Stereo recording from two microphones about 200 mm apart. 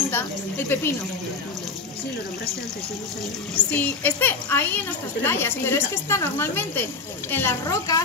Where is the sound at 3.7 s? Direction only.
10° left (ahead or behind).